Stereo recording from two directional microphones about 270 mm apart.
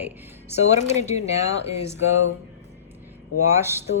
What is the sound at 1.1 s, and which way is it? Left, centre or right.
Speech, left.